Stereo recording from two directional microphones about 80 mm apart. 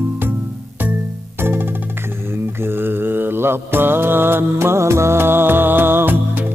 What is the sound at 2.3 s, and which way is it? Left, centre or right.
Mantra, right.